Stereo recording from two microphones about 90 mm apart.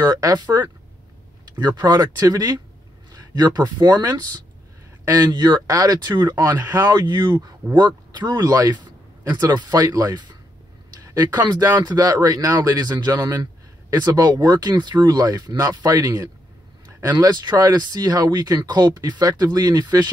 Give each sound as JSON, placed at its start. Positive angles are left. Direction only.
{"t": 0.0, "sound": "speech", "side_deg": -50}
{"t": 11.8, "sound": "speech", "side_deg": -45}